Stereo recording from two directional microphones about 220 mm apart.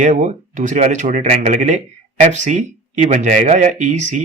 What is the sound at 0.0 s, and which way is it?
Speech, 35° right (ahead or behind).